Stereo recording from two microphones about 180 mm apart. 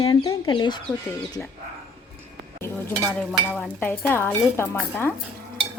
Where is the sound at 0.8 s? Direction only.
5° left (ahead or behind).